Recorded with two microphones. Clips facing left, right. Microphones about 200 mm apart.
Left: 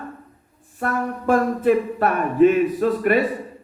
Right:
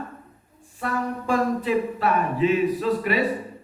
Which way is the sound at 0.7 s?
50° left (ahead or behind).